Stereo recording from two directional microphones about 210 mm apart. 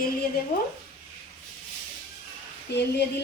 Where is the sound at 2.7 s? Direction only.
55° left (ahead or behind).